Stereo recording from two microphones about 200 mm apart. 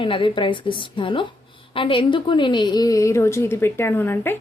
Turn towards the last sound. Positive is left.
turn(degrees=10)  # may be behind; listen again after turning